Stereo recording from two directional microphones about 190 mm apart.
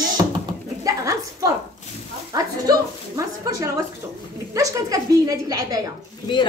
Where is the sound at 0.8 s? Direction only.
15° right (ahead or behind).